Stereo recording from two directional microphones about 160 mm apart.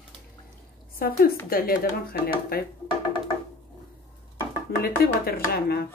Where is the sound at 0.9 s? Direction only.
65° left (ahead or behind).